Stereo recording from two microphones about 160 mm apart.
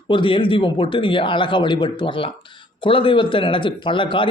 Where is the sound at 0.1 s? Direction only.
30° left (ahead or behind).